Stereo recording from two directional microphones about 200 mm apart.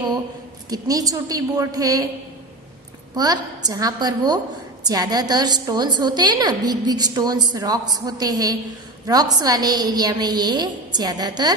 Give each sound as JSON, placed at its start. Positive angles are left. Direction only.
{"t": 0.7, "sound": "a woman's voice", "side_deg": -20}
{"t": 3.2, "sound": "a woman's voice", "side_deg": -20}